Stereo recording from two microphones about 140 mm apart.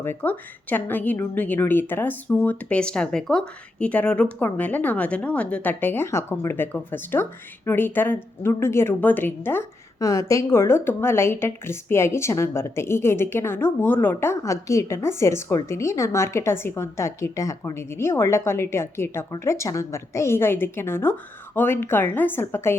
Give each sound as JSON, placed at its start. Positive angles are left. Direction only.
{"t": 0.0, "sound": "speech", "side_deg": 15}